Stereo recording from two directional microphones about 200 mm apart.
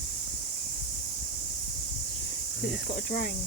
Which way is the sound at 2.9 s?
55° left (ahead or behind).